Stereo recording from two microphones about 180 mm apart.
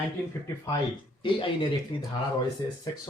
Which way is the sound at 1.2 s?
30° left (ahead or behind).